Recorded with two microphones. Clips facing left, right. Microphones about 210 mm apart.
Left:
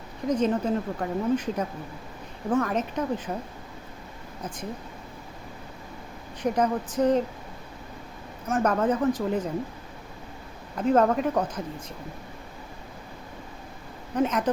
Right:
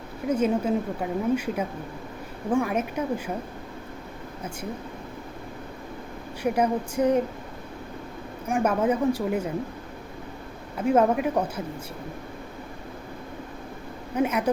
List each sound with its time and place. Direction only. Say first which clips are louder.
0.3 s speech: right 1 dB; 10° right (ahead or behind)
6.4 s speech: right 1 dB; 10° right (ahead or behind)
8.4 s speech: right 1 dB; 10° right (ahead or behind)
10.8 s speech: even; 10° right (ahead or behind)
14.2 s speech: right 1 dB; 10° right (ahead or behind)